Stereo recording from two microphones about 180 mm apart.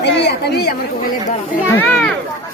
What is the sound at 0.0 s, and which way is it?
Speech, 70° left (ahead or behind).